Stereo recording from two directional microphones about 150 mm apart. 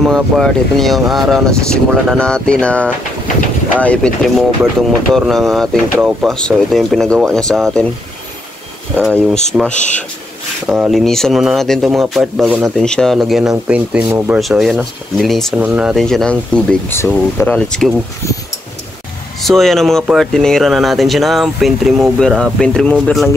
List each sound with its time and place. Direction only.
0.0 s speech: centre (ahead or behind)
9.0 s speech: 5° left (ahead or behind)
10.9 s speech: centre (ahead or behind); by 14.4 s 15° right (ahead or behind)
14.4 s speech: centre (ahead or behind)
19.4 s speech: centre (ahead or behind)